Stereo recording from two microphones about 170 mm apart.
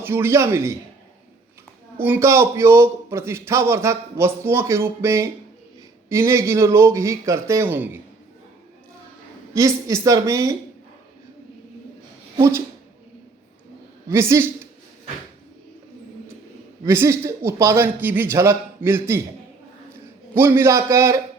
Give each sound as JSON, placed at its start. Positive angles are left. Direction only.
{"t": 0.0, "sound": "a man's voice", "side_deg": -15}
{"t": 2.0, "sound": "a man's voice", "side_deg": -15}
{"t": 9.6, "sound": "a woman's voice", "side_deg": -20}
{"t": 12.4, "sound": "a man's voice", "side_deg": -15}
{"t": 14.1, "sound": "a man's voice", "side_deg": -15}
{"t": 16.8, "sound": "a man's voice", "side_deg": -15}
{"t": 20.3, "sound": "a man's voice", "side_deg": -15}